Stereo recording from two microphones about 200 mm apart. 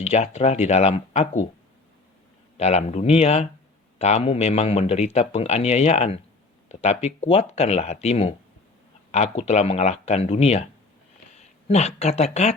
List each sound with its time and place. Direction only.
0.0 s a man's voice: 35° left (ahead or behind)
2.6 s a man's voice: 35° left (ahead or behind)